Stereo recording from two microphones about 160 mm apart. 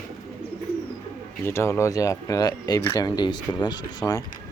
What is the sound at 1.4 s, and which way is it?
Speech, 15° left (ahead or behind).